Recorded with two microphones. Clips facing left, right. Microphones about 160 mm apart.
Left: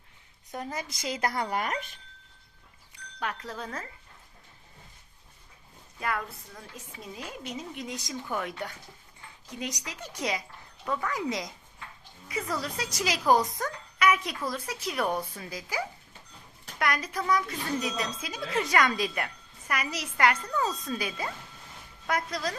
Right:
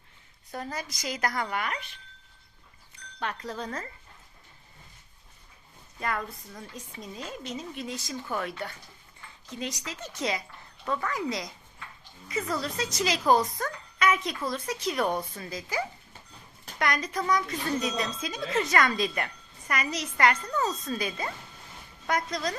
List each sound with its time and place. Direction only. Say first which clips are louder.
0.5 s a woman's voice: even; 20° left (ahead or behind); by 2.0 s 45° left (ahead or behind)
3.2 s speech: right 1 dB; 5° left (ahead or behind)
6.0 s speech: even; 5° left (ahead or behind)
12.5 s speech: right 3 dB; 10° left (ahead or behind)